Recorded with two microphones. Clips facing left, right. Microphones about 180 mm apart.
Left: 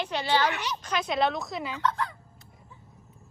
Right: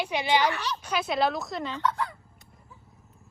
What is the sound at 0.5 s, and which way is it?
Speech, 15° left (ahead or behind).